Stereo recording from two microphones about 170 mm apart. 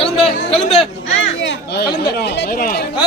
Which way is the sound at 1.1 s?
90° left.